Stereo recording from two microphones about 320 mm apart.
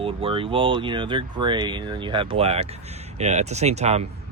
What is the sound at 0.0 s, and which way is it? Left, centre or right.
Speech, centre.